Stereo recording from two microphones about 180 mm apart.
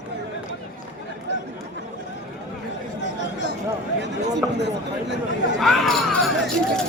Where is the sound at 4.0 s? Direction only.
75° right (ahead or behind).